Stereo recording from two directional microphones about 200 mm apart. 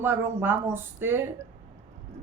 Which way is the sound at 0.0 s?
10° right (ahead or behind).